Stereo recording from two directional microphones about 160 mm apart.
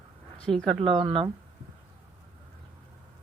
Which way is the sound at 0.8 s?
35° right (ahead or behind).